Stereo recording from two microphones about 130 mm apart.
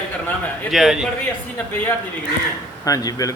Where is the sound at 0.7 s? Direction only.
Centre (ahead or behind).